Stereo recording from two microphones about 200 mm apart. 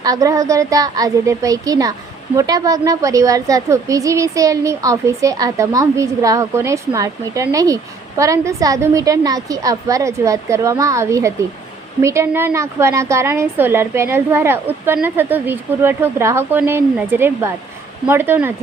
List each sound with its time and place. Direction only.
0.0 s a woman's voice: 15° right (ahead or behind)